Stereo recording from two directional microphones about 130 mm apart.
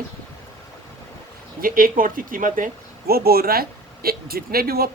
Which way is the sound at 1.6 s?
90° right.